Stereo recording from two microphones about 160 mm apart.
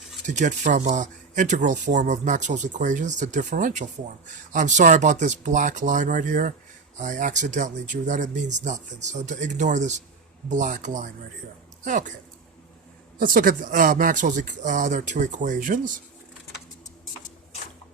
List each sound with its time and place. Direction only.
0.3 s speech: 50° right (ahead or behind)
13.1 s speech: 60° right (ahead or behind)